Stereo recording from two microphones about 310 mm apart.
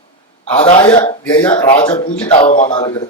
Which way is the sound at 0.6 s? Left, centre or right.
Centre.